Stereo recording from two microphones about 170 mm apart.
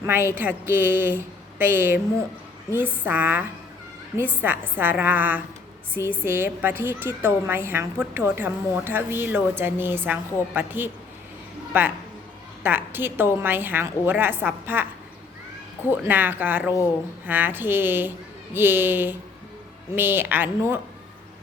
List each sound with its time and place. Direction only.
0.0 s a woman's voice: 15° right (ahead or behind)
15.9 s a woman's voice: 10° right (ahead or behind)